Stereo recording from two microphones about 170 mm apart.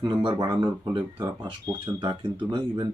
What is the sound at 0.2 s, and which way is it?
Speech, 25° right (ahead or behind).